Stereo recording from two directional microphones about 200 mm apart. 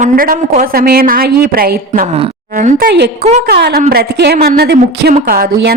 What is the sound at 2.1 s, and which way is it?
Speech, 35° right (ahead or behind).